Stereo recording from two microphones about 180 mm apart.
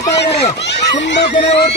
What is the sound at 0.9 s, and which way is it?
Speech, 80° left.